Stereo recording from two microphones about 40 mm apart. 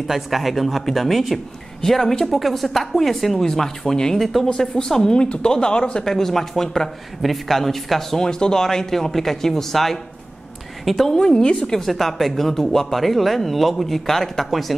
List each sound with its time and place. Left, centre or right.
0.0 s speech: centre; by 6.0 s left
6.0 s speech: centre